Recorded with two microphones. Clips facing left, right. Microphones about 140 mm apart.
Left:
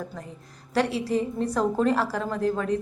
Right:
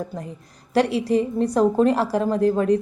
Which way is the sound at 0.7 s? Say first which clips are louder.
Right 5 dB; 15° right (ahead or behind).